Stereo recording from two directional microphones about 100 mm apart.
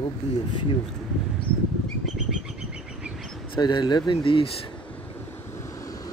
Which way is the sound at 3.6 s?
45° left (ahead or behind).